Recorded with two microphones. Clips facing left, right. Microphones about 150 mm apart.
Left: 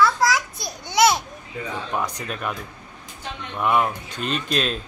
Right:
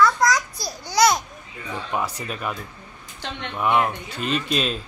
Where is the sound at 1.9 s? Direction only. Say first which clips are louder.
Right 2 dB; 5° right (ahead or behind).